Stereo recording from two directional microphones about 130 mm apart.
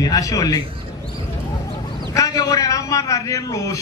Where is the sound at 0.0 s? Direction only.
25° left (ahead or behind).